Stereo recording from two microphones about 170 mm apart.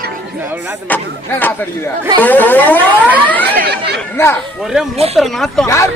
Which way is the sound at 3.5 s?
75° right (ahead or behind).